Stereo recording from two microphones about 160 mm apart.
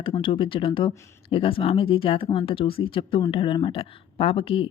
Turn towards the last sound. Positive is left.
turn(degrees=35)  # may be behind; listen again after turning